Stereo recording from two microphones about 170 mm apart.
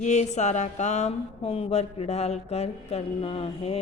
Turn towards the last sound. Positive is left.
turn(degrees=35)  # may be behind; listen again after turning